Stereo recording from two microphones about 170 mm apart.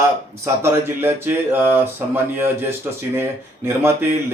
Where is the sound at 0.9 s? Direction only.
10° right (ahead or behind).